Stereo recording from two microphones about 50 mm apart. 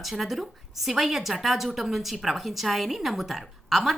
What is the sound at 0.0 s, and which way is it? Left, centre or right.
A woman's voice, centre.